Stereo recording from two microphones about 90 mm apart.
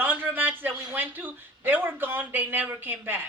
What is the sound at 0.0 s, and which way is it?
Speech, 20° right (ahead or behind).